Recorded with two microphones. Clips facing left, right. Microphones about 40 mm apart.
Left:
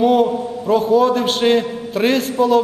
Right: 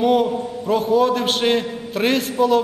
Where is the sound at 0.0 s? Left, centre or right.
Centre.